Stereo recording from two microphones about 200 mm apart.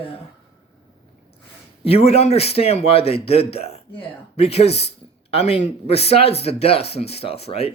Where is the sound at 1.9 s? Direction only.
30° left (ahead or behind).